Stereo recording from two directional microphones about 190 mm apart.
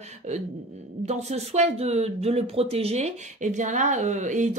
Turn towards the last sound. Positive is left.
turn(degrees=-40)  # may be behind; listen again after turning